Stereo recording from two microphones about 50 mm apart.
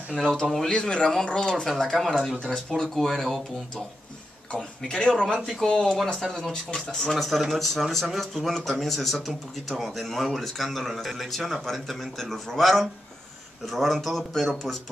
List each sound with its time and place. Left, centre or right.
0.4 s speech: centre
0.7 s speech: centre
4.5 s speech: centre